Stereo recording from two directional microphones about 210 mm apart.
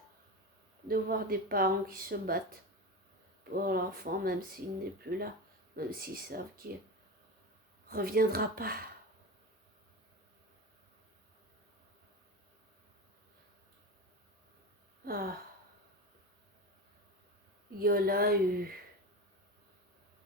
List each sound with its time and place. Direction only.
0.9 s speech: 45° right (ahead or behind)
7.9 s speech: 45° right (ahead or behind)
15.0 s gasp: 45° right (ahead or behind)
17.7 s speech: 45° right (ahead or behind)